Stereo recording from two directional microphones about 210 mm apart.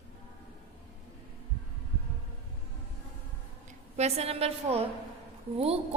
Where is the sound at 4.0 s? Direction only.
30° right (ahead or behind).